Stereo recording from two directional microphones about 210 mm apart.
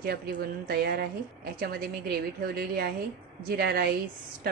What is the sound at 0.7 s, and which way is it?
A woman's voice, 45° right (ahead or behind).